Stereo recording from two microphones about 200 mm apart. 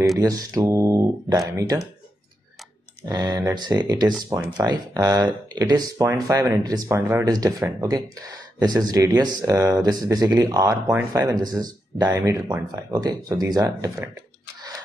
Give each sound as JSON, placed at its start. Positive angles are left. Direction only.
{"t": 0.2, "sound": "speech", "side_deg": -15}
{"t": 3.1, "sound": "speech", "side_deg": -20}